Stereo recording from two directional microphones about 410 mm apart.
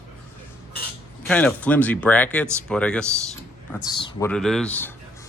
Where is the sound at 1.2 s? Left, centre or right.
Centre.